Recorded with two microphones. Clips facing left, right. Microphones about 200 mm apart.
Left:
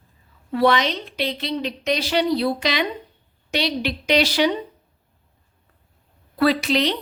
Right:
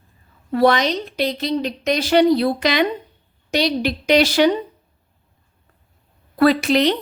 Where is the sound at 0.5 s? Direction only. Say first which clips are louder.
Right 3 dB; 45° right (ahead or behind).